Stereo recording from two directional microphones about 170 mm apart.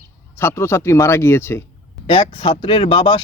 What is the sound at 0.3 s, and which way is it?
Speech, 15° left (ahead or behind).